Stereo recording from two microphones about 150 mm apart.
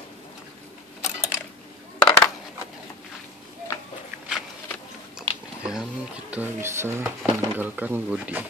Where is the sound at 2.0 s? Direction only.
20° left (ahead or behind).